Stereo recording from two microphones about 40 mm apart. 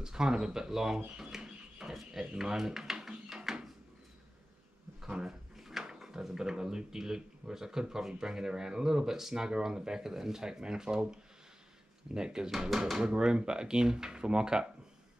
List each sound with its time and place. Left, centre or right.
0.0 s speech: centre
1.1 s a sound: centre
5.0 s speech: centre
12.4 s speech: centre
13.0 s speech: right